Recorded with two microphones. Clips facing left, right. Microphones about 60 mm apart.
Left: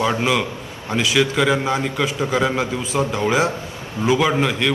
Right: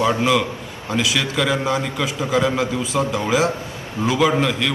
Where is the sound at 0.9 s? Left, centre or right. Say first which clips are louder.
Left 3 dB; centre.